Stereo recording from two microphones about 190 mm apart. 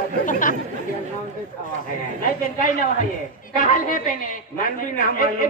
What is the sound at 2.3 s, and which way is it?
A woman's voice, 45° left (ahead or behind).